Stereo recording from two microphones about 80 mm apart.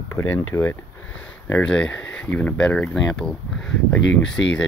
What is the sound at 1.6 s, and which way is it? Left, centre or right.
Speech, centre.